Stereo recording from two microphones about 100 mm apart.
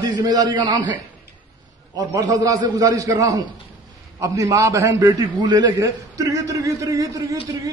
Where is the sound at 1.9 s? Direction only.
35° right (ahead or behind).